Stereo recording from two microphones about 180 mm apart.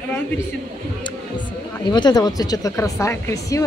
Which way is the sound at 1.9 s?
25° left (ahead or behind).